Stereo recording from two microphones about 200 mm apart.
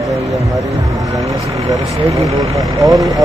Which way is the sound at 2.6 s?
15° right (ahead or behind).